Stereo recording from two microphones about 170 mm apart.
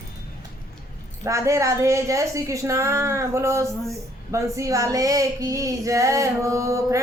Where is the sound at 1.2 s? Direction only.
15° right (ahead or behind).